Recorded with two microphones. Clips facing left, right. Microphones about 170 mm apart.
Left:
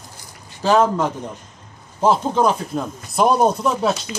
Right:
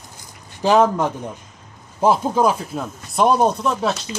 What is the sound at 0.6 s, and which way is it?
Speech, 15° right (ahead or behind).